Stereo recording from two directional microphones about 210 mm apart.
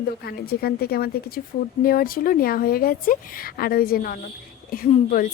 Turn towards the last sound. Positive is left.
turn(degrees=40)  # may be behind; listen again after turning